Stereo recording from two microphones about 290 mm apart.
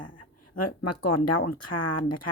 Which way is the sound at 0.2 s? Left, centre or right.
Left.